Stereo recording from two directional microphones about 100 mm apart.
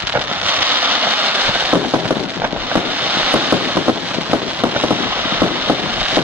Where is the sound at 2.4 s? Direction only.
20° right (ahead or behind).